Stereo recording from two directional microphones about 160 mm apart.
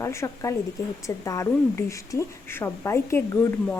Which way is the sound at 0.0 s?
20° left (ahead or behind).